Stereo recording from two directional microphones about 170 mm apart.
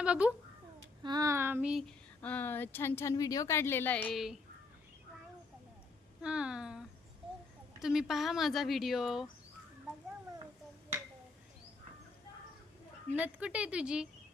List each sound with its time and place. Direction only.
0.0 s a child's voice: 5° right (ahead or behind)
1.0 s child singing: 20° right (ahead or behind)
2.2 s a woman's voice: 10° left (ahead or behind)
6.2 s speech: 5° right (ahead or behind)
13.1 s speech: 10° right (ahead or behind)